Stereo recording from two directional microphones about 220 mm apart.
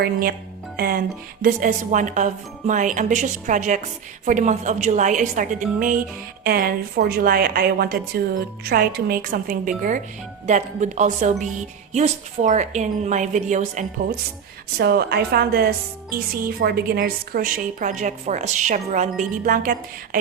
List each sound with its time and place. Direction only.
0.0 s a woman's voice: 45° right (ahead or behind)
14.8 s a woman's voice: 45° right (ahead or behind)